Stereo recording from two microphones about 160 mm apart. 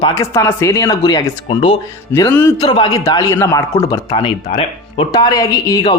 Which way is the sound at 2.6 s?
25° left (ahead or behind).